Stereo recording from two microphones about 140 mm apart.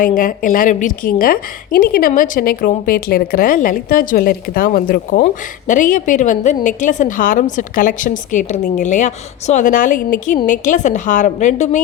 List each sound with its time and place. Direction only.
0.0 s a woman's voice: 80° left
5.2 s a woman's voice: 65° left (ahead or behind)